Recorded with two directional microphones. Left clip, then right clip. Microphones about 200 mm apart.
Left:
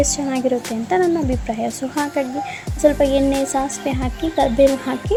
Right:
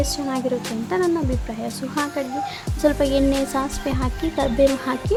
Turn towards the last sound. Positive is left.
turn(degrees=0)  # may be behind; listen again after turning